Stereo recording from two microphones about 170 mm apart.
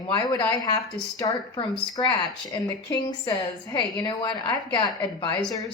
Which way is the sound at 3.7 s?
25° left (ahead or behind).